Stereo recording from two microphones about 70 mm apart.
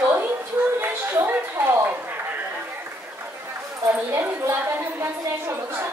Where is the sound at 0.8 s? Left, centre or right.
Right.